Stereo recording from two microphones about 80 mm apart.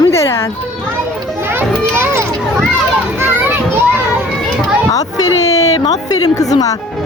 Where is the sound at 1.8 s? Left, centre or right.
Right.